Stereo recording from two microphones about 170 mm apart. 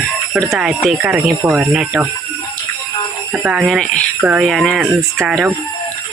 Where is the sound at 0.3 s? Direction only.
Centre (ahead or behind).